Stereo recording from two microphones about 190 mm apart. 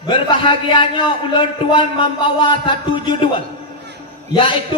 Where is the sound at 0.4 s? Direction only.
25° left (ahead or behind).